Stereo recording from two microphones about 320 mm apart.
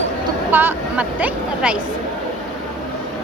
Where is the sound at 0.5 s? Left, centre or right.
Centre.